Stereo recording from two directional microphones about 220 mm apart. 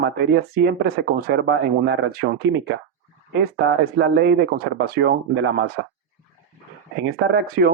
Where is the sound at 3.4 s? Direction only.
50° right (ahead or behind).